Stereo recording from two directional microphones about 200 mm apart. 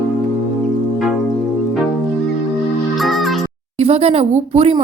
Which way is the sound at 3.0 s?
Centre (ahead or behind).